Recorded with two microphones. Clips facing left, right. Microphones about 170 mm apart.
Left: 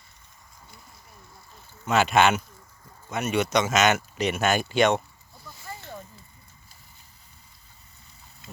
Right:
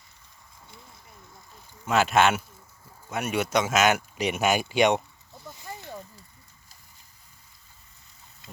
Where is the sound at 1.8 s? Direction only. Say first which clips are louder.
Left 1 dB; centre (ahead or behind).